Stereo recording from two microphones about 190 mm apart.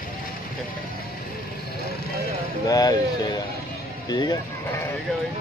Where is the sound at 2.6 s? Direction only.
20° left (ahead or behind).